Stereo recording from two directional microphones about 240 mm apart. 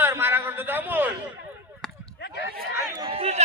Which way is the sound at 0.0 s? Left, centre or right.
Centre.